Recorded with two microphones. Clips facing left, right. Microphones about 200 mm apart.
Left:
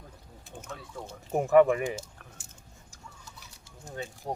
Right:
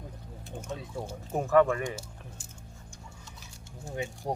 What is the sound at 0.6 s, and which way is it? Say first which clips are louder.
Speech: right 4 dB; 20° right (ahead or behind).